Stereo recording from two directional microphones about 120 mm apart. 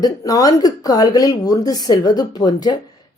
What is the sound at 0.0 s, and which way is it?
A woman's voice, 30° left (ahead or behind).